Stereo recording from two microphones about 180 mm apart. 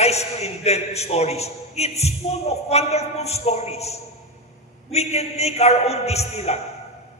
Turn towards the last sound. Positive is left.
turn(degrees=35)  # may be behind; listen again after turning